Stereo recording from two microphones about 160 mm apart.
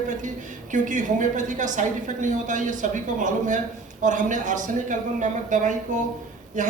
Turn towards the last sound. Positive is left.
turn(degrees=-50)  # may be behind; listen again after turning